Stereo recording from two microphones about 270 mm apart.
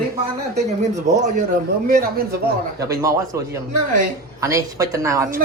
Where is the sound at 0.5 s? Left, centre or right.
Right.